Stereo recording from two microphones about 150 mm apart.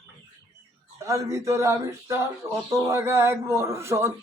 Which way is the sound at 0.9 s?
20° right (ahead or behind).